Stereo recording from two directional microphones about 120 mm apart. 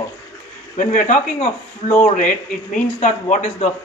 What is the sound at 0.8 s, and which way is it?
Speech, 90° left.